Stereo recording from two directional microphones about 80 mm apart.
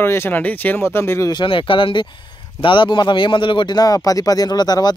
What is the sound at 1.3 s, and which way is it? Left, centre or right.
Speech, left.